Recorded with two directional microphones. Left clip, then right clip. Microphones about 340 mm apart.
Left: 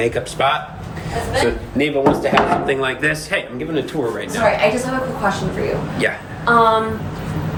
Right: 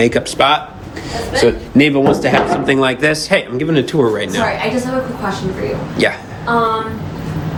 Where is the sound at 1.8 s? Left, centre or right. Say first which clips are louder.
Right 3 dB; right.